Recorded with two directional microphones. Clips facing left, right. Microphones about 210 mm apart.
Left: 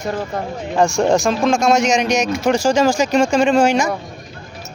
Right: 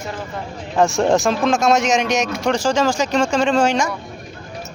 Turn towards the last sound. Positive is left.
turn(degrees=10)  # may be behind; listen again after turning